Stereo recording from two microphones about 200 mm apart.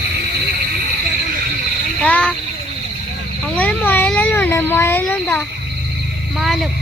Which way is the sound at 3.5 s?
10° left (ahead or behind).